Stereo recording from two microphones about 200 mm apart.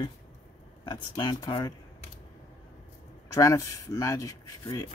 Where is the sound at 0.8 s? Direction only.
25° left (ahead or behind).